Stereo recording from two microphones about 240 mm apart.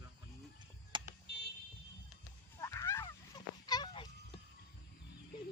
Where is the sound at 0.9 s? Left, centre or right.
Centre.